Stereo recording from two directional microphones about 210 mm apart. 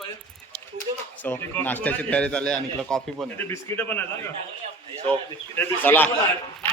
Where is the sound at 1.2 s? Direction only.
10° left (ahead or behind).